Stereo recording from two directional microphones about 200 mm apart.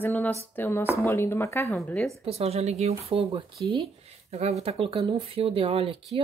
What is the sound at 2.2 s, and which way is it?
Speech, 30° right (ahead or behind).